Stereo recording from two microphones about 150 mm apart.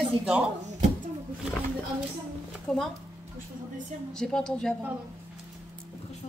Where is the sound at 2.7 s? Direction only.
5° left (ahead or behind).